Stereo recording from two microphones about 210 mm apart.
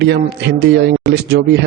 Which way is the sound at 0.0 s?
50° right (ahead or behind).